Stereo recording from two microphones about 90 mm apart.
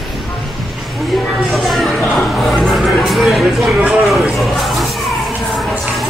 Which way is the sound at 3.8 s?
15° right (ahead or behind).